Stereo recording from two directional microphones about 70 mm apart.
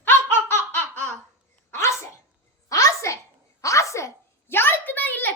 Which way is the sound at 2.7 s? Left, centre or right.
Left.